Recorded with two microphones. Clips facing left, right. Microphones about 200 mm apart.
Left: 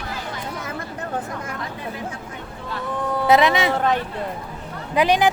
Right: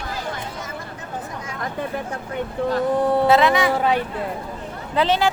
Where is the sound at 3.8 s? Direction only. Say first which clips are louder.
Right 1 dB; 10° right (ahead or behind).